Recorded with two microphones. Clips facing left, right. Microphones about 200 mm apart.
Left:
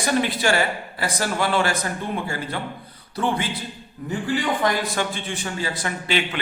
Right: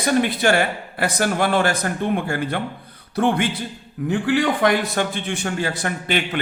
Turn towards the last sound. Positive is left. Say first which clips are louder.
# right 2 dB
turn(degrees=-50)  # may be behind; listen again after turning